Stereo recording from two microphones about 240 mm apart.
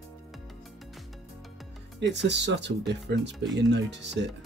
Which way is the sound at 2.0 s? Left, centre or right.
Right.